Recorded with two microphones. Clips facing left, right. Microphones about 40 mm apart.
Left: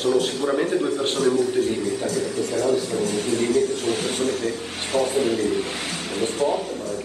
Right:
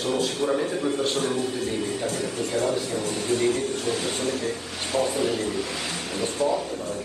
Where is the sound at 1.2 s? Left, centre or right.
Right.